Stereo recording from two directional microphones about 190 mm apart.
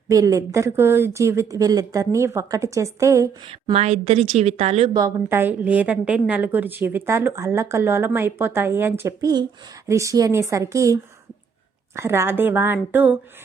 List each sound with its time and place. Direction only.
0.1 s a woman's voice: 15° right (ahead or behind)
3.4 s a woman's voice: 30° right (ahead or behind)
4.9 s a woman's voice: 15° right (ahead or behind)